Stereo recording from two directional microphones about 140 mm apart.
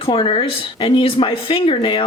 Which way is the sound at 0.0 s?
40° left (ahead or behind).